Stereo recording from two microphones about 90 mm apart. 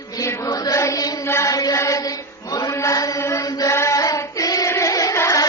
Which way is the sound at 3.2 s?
35° left (ahead or behind).